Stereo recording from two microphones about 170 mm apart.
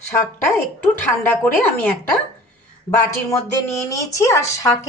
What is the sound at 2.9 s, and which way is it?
Speech, 15° left (ahead or behind).